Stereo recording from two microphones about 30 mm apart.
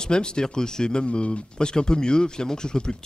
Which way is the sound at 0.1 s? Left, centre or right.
Left.